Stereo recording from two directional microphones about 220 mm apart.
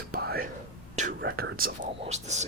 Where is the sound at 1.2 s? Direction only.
45° right (ahead or behind).